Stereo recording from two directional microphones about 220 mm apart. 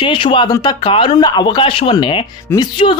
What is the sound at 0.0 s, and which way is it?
Speech, 25° left (ahead or behind).